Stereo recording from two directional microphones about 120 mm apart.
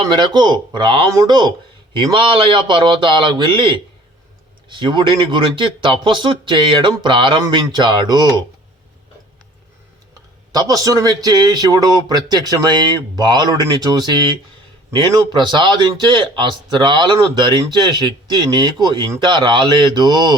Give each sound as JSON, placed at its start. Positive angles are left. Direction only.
{"t": 0.0, "sound": "speech", "side_deg": -40}
{"t": 1.1, "sound": "speech", "side_deg": -35}
{"t": 10.5, "sound": "speech", "side_deg": -30}